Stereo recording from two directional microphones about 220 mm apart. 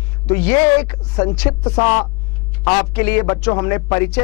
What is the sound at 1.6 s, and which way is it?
Speech, 25° left (ahead or behind).